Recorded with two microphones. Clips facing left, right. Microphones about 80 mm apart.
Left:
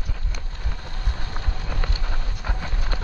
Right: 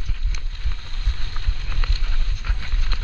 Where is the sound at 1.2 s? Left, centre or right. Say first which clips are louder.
Left 4 dB; centre.